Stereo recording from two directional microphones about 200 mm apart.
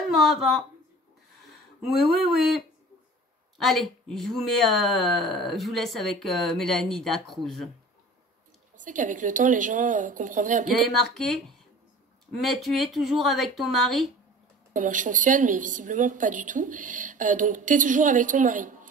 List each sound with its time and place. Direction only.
0.1 s a woman's voice: centre (ahead or behind)
8.7 s a woman's voice: 40° right (ahead or behind)
10.7 s a woman's voice: centre (ahead or behind)
14.7 s a woman's voice: 40° right (ahead or behind)